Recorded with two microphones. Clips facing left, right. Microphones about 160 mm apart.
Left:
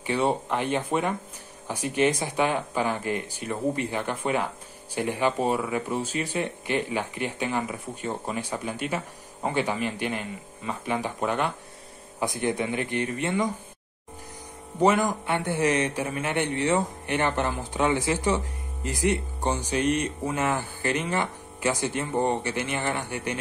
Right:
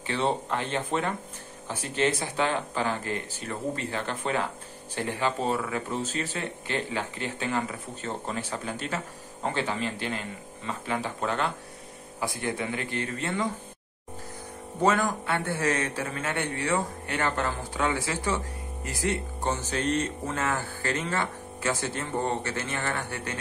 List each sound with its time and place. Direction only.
0.0 s speech: 15° left (ahead or behind)
14.8 s speech: 15° left (ahead or behind)